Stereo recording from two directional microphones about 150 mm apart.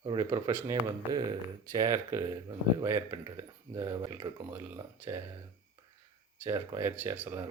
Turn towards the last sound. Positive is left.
turn(degrees=-15)  # may be behind; listen again after turning